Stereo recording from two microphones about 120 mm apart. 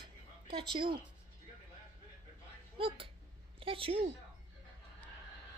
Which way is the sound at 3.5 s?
50° right (ahead or behind).